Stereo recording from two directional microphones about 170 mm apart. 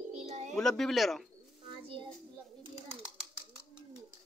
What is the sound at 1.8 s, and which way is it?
Child singing, 30° right (ahead or behind).